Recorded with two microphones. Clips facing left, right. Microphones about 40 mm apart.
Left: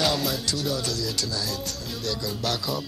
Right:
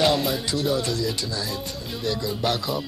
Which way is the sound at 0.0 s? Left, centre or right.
Centre.